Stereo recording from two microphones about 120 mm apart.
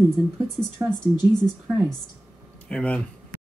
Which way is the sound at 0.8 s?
25° right (ahead or behind).